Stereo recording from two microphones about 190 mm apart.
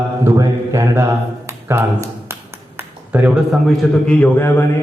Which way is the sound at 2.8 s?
10° right (ahead or behind).